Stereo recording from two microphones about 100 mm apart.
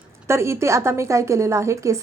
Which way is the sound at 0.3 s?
30° right (ahead or behind).